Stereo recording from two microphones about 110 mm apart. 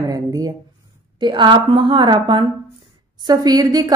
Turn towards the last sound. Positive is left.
turn(degrees=-35)  # may be behind; listen again after turning